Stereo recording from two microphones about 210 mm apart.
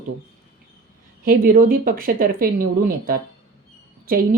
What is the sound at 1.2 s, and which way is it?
Speech, 45° right (ahead or behind).